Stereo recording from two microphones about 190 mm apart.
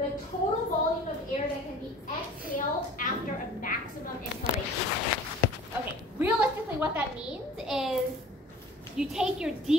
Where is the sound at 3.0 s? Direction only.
45° left (ahead or behind).